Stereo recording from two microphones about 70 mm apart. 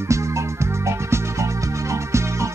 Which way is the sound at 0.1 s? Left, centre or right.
Right.